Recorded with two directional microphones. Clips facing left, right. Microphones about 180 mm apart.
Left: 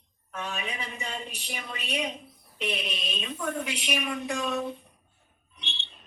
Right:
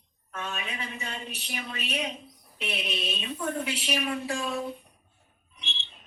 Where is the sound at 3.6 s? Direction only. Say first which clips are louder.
Right 2 dB; 15° left (ahead or behind).